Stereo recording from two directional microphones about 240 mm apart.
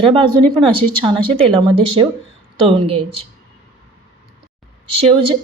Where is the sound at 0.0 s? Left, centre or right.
Right.